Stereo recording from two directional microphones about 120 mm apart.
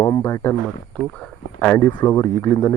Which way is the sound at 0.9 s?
10° left (ahead or behind).